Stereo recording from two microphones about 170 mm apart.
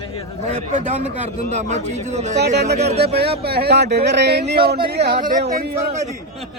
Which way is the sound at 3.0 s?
70° right (ahead or behind).